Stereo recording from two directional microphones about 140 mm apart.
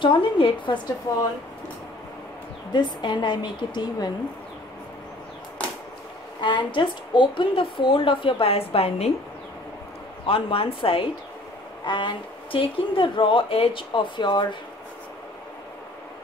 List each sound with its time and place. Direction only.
0.0 s speech: 35° left (ahead or behind)
2.7 s speech: 35° left (ahead or behind)
6.4 s speech: 35° left (ahead or behind)
10.2 s speech: 40° left (ahead or behind)